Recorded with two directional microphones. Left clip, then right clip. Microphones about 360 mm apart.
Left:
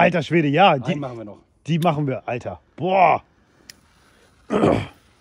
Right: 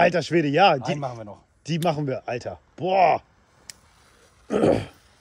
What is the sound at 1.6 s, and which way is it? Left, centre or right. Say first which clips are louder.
Speech: left 3 dB; centre.